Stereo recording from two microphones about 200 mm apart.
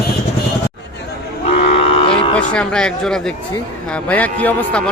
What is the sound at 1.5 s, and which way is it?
Cattle, 30° left (ahead or behind).